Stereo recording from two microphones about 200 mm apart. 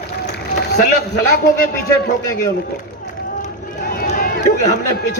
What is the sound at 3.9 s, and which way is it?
Crowd, 45° left (ahead or behind).